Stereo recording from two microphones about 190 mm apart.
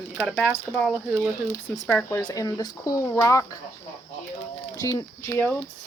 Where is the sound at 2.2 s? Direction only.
20° left (ahead or behind).